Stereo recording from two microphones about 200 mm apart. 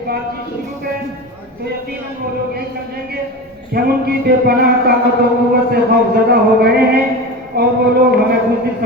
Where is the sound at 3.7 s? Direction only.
50° right (ahead or behind).